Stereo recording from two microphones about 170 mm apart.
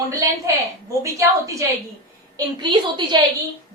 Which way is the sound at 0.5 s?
20° right (ahead or behind).